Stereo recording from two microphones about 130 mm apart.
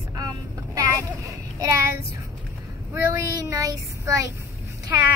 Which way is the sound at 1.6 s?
25° right (ahead or behind).